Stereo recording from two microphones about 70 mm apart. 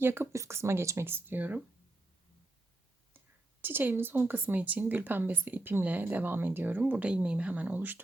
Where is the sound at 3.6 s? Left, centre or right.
Right.